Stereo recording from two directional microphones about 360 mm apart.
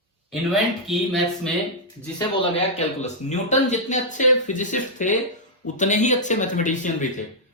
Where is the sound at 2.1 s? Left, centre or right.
Centre.